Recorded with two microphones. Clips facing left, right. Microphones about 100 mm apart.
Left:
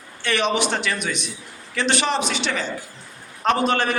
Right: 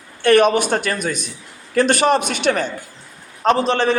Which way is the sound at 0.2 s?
50° right (ahead or behind).